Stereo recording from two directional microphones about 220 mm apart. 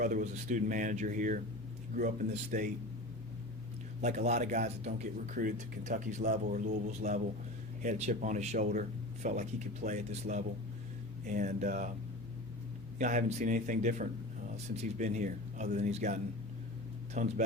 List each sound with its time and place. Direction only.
0.0 s speech: 35° right (ahead or behind)
4.0 s speech: 30° right (ahead or behind)
13.0 s speech: 35° right (ahead or behind)
17.2 s speech: 35° right (ahead or behind)